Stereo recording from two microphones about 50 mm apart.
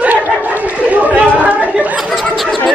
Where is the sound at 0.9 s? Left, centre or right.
Right.